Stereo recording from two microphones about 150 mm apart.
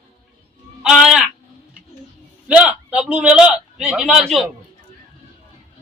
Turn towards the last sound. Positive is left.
turn(degrees=0)  # may be behind; listen again after turning